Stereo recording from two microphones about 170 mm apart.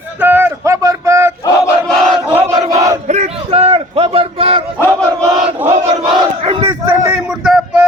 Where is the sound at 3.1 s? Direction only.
40° right (ahead or behind).